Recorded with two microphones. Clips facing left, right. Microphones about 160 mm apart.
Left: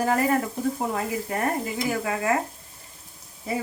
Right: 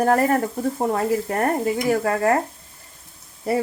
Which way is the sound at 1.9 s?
60° right (ahead or behind).